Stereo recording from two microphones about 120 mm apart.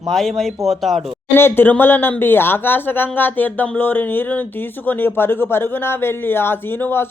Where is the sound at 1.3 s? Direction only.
15° left (ahead or behind).